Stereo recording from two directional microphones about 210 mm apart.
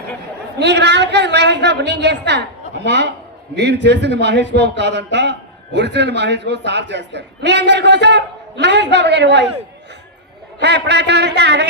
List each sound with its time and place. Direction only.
0.6 s a man's voice: 55° right (ahead or behind)
10.6 s speech: 55° right (ahead or behind)